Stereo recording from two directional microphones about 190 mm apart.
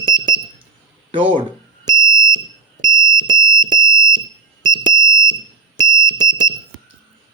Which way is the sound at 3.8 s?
15° left (ahead or behind).